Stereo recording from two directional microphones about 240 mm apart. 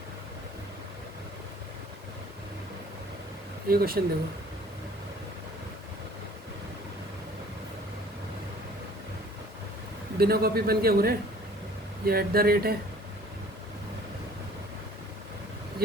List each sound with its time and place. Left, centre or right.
3.7 s a man's voice: right
10.2 s a man's voice: right